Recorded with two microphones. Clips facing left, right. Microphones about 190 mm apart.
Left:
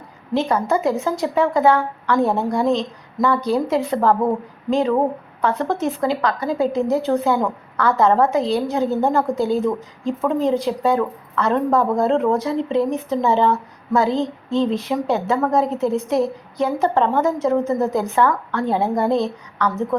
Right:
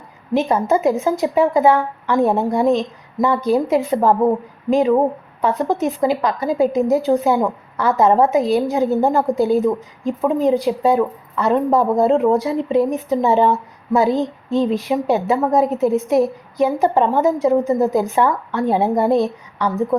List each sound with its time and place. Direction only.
0.3 s speech: 20° right (ahead or behind)